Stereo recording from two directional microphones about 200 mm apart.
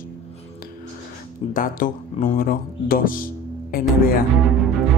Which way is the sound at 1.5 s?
45° left (ahead or behind).